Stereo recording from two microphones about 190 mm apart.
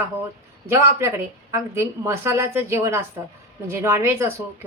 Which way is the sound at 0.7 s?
15° right (ahead or behind).